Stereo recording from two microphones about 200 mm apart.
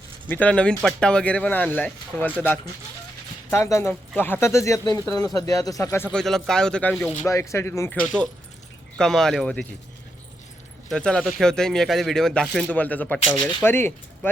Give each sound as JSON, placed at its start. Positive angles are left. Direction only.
{"t": 0.3, "sound": "speech", "side_deg": 5}
{"t": 3.5, "sound": "speech", "side_deg": 15}
{"t": 6.1, "sound": "speech", "side_deg": 0}
{"t": 10.8, "sound": "speech", "side_deg": 5}